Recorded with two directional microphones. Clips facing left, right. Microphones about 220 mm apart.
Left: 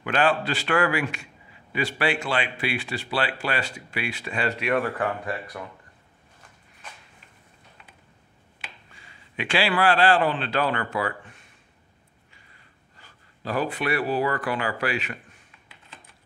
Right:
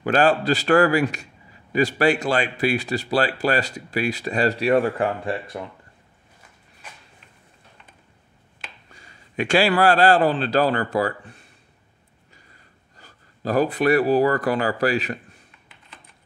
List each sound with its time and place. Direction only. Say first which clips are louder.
0.0 s a man's voice: right 5 dB; 40° right (ahead or behind)
8.9 s a man's voice: right 7 dB; 40° right (ahead or behind)
12.9 s speech: right 5 dB; 40° right (ahead or behind)